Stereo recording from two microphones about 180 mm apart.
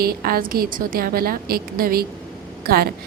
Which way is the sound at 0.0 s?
55° right (ahead or behind).